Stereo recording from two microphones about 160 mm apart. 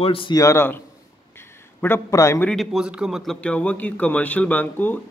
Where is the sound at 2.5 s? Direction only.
Centre (ahead or behind).